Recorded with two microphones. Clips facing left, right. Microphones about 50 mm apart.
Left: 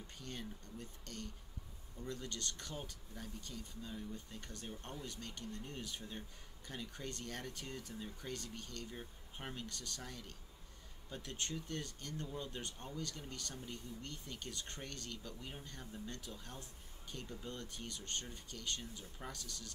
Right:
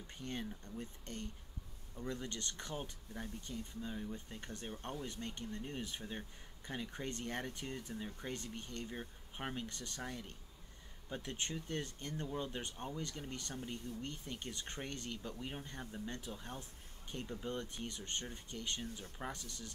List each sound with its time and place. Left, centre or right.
0.2 s speech: right